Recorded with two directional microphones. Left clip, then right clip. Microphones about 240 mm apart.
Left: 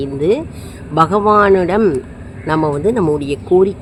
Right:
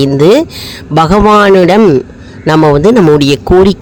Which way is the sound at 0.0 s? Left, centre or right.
Right.